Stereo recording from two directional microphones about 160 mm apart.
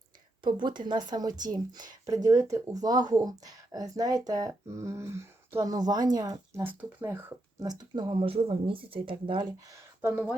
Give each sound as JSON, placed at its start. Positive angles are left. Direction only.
{"t": 0.4, "sound": "speech", "side_deg": -30}
{"t": 7.6, "sound": "speech", "side_deg": -25}